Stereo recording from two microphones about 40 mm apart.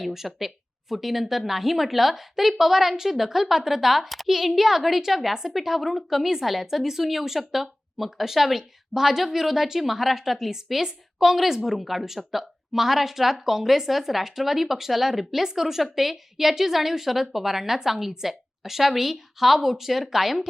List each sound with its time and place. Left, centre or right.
0.0 s speech: centre